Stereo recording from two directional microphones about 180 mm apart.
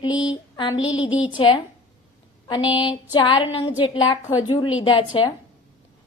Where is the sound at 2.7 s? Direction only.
25° left (ahead or behind).